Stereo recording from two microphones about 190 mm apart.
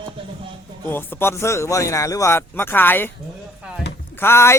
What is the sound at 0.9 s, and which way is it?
Speech, 10° left (ahead or behind).